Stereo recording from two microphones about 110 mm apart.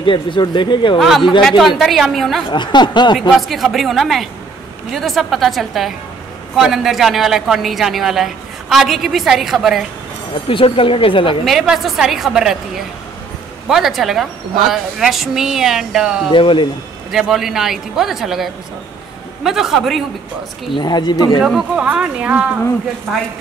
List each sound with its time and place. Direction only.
0.0 s speech: 50° left (ahead or behind)
0.9 s a woman's voice: centre (ahead or behind)
2.5 s speech: 45° left (ahead or behind)
3.2 s a woman's voice: centre (ahead or behind)
10.5 s speech: 55° left (ahead or behind)
11.4 s a woman's voice: centre (ahead or behind)
13.7 s a woman's voice: 5° right (ahead or behind)
16.3 s speech: 50° left (ahead or behind)
17.1 s a woman's voice: 5° right (ahead or behind)
20.7 s speech: 40° left (ahead or behind)
21.4 s a woman's voice: centre (ahead or behind)
23.1 s a woman's voice: 5° left (ahead or behind)